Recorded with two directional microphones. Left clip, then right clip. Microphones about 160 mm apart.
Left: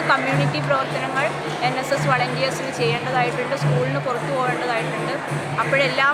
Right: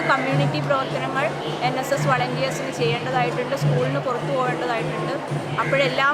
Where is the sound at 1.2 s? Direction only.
Centre (ahead or behind).